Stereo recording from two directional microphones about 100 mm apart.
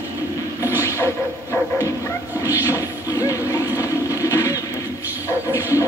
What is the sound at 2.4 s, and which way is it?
Speech, 35° left (ahead or behind).